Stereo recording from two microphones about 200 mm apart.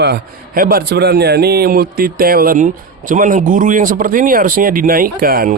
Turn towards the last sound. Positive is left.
turn(degrees=-50)  # may be behind; listen again after turning